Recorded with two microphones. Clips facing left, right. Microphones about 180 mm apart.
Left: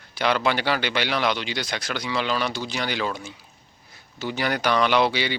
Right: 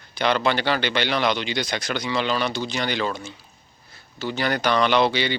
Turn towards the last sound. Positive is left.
turn(degrees=10)  # may be behind; listen again after turning